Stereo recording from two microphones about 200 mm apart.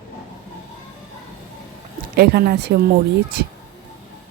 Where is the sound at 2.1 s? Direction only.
50° right (ahead or behind).